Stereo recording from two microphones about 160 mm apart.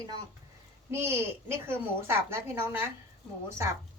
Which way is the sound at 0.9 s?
15° right (ahead or behind).